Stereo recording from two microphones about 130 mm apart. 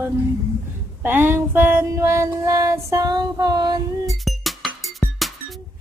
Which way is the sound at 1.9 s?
20° right (ahead or behind).